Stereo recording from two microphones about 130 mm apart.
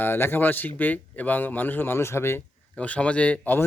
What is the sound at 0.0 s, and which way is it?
A man's voice, 15° left (ahead or behind).